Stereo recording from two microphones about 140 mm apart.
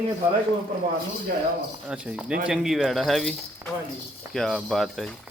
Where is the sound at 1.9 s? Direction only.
5° right (ahead or behind).